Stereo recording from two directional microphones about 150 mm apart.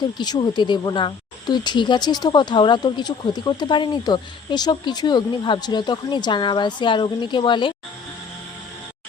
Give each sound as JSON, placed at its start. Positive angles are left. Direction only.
{"t": 0.2, "sound": "speech", "side_deg": 30}